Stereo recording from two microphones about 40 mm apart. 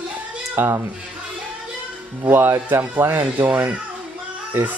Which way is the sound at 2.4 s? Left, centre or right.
Right.